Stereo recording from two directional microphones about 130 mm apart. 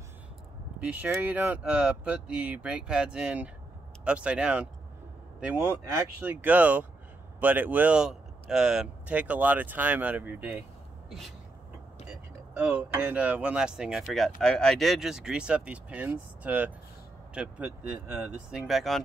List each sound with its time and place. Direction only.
0.7 s speech: 10° right (ahead or behind)
11.1 s speech: centre (ahead or behind)
12.5 s speech: 10° right (ahead or behind)